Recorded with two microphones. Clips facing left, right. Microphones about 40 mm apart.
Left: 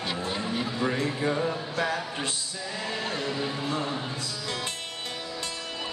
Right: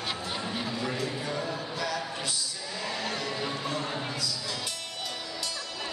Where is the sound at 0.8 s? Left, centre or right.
Left.